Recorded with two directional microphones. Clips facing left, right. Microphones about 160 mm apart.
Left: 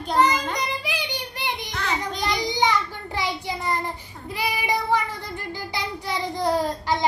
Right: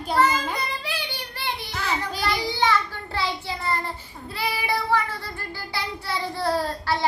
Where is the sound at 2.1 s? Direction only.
20° left (ahead or behind).